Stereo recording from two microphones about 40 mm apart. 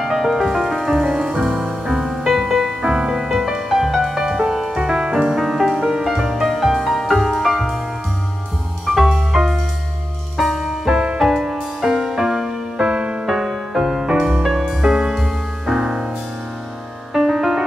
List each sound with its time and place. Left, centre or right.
0.0 s music: centre
1.0 s music: centre
6.8 s music: centre
8.8 s music: centre
10.9 s music: right
11.1 s music: centre
12.7 s music: right
13.3 s music: centre
14.4 s music: centre
14.8 s music: centre
17.1 s music: centre